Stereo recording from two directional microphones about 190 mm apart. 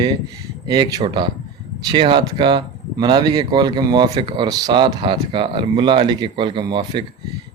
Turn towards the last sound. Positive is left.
turn(degrees=-25)  # may be behind; listen again after turning